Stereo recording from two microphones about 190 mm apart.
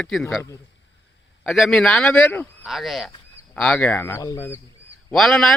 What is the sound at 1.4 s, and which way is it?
Speech, centre (ahead or behind).